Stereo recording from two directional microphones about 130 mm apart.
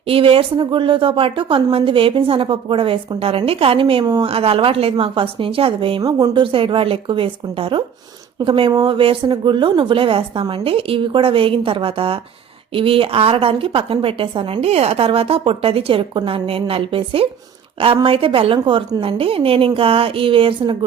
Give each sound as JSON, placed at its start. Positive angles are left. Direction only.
{"t": 0.0, "sound": "a woman's voice", "side_deg": -45}
{"t": 4.3, "sound": "a woman's voice", "side_deg": -50}
{"t": 6.0, "sound": "a woman's voice", "side_deg": -30}